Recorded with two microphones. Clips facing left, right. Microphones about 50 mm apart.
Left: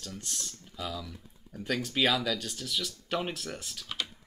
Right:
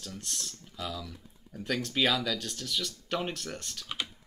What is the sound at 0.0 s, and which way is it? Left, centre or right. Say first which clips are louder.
Speech: even; centre.